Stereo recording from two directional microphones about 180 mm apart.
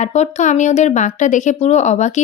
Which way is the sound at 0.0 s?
40° left (ahead or behind).